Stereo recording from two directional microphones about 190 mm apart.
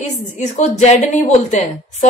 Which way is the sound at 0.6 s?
35° left (ahead or behind).